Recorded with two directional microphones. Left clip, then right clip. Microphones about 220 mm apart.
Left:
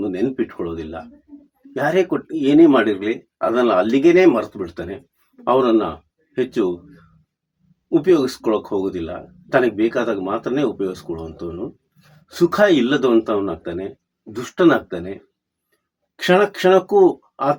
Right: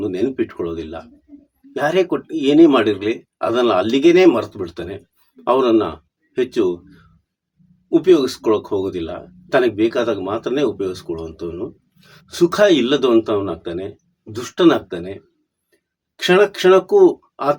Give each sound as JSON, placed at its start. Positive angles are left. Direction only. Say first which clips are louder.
{"t": 0.1, "sound": "speech", "louder": "right 1 dB", "side_deg": 0}
{"t": 8.2, "sound": "speech", "louder": "right 2 dB", "side_deg": 0}
{"t": 16.2, "sound": "speech", "louder": "right 2 dB", "side_deg": 5}